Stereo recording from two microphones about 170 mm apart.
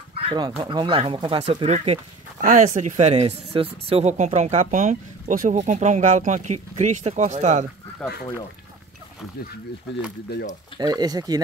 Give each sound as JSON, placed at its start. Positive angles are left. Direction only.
{"t": 0.2, "sound": "speech", "side_deg": -30}
{"t": 2.4, "sound": "speech", "side_deg": -45}
{"t": 8.0, "sound": "speech", "side_deg": 5}
{"t": 10.8, "sound": "speech", "side_deg": -25}